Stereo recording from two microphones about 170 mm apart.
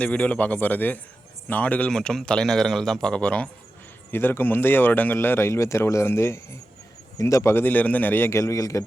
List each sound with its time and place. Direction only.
0.0 s speech: 5° left (ahead or behind)